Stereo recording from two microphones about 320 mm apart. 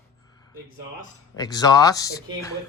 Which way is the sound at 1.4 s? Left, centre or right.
Centre.